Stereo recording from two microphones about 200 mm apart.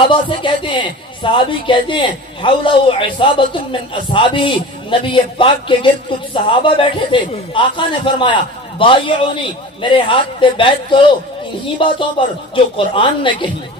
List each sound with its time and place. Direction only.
0.1 s a man's voice: 25° left (ahead or behind)